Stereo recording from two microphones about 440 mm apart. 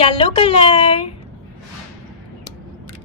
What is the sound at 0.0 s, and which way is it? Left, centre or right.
A woman's voice, centre.